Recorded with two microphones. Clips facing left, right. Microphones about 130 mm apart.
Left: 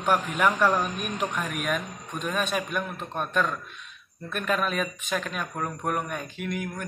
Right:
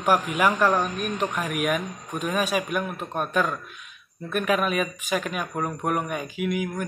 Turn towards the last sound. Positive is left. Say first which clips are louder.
# right 5 dB
turn(degrees=-5)  # may be behind; listen again after turning